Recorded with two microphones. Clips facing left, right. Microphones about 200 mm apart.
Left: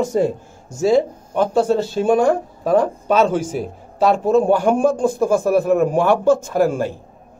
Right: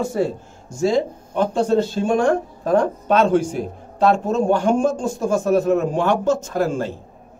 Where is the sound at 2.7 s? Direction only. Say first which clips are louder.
Left 1 dB; 5° left (ahead or behind).